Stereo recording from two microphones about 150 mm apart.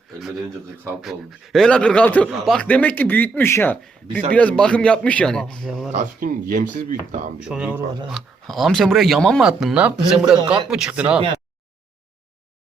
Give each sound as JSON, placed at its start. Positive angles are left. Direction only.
{"t": 0.2, "sound": "speech", "side_deg": 0}
{"t": 6.1, "sound": "speech", "side_deg": -70}
{"t": 7.3, "sound": "speech", "side_deg": -5}